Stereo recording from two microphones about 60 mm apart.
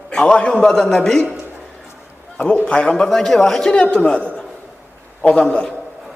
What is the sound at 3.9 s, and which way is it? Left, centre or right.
Speech, left.